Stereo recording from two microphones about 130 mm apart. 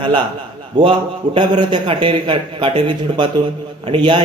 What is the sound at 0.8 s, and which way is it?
A man's voice, 45° right (ahead or behind).